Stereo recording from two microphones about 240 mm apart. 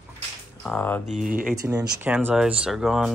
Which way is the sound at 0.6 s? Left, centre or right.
Centre.